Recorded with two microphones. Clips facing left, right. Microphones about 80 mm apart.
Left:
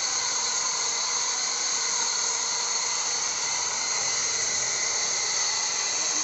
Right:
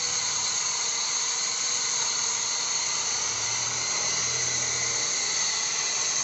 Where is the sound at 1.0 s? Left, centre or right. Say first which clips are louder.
Left 3 dB; centre.